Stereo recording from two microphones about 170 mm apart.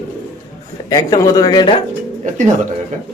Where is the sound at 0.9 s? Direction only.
25° left (ahead or behind).